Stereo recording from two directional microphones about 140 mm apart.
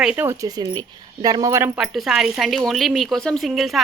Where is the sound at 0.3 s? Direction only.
25° right (ahead or behind).